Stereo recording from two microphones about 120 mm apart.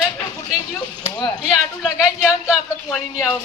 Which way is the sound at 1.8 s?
5° right (ahead or behind).